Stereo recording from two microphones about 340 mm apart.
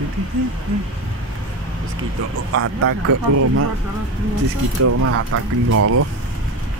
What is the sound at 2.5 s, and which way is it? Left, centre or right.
Speech, right.